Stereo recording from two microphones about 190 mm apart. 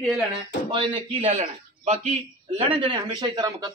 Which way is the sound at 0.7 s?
25° right (ahead or behind).